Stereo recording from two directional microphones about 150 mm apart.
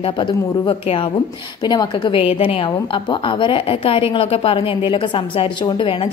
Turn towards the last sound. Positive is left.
turn(degrees=35)  # may be behind; listen again after turning